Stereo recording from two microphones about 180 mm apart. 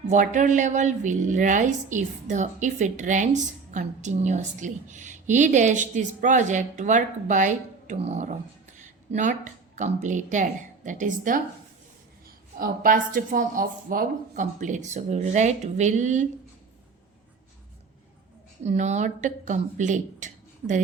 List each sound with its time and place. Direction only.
0.1 s a woman's voice: 45° right (ahead or behind)
12.5 s a woman's voice: 50° right (ahead or behind)
18.6 s a woman's voice: 40° right (ahead or behind)